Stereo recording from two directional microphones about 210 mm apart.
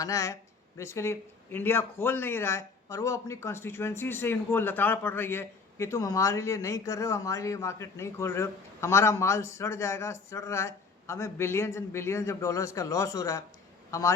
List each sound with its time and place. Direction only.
0.0 s a man's voice: 15° left (ahead or behind)